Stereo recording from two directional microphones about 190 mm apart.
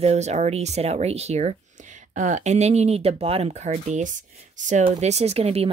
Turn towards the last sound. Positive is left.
turn(degrees=-30)  # may be behind; listen again after turning